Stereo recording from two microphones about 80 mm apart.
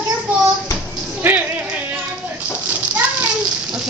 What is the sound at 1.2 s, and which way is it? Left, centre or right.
Music, right.